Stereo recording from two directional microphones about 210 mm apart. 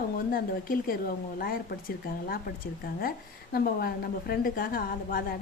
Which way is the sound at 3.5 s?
45° left (ahead or behind).